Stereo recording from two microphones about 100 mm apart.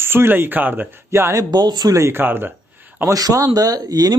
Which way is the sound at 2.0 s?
20° right (ahead or behind).